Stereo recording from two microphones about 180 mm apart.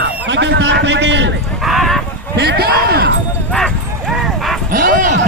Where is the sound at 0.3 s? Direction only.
75° right (ahead or behind).